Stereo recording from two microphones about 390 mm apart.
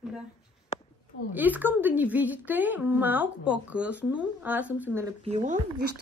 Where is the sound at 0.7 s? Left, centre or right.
Centre.